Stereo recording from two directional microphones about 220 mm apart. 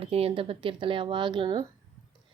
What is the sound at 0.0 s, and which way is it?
A woman's voice, 25° right (ahead or behind).